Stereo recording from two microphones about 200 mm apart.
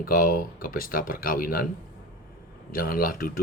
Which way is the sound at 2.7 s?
45° left (ahead or behind).